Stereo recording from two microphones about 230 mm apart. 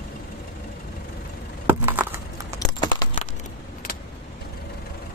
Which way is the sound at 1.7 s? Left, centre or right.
Centre.